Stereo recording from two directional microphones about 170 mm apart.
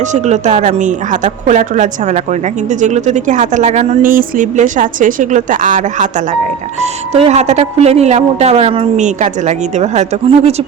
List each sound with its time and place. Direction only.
0.1 s a woman's voice: 45° right (ahead or behind)
4.0 s a woman's voice: 55° right (ahead or behind)